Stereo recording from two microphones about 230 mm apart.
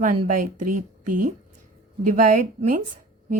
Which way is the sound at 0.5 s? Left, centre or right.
Right.